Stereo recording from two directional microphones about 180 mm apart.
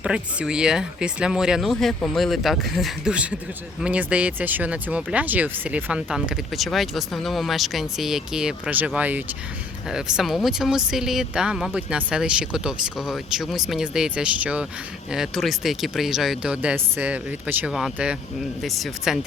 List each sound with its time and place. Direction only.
0.0 s speech: 5° right (ahead or behind)